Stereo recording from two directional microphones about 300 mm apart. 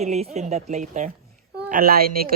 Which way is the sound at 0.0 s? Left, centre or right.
Right.